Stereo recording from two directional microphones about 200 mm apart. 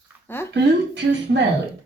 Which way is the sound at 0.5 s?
55° right (ahead or behind).